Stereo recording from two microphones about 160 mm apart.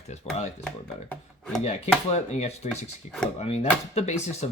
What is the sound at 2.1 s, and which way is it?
Speech, 45° left (ahead or behind).